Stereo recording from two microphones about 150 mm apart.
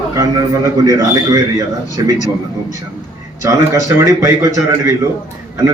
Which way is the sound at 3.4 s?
20° right (ahead or behind).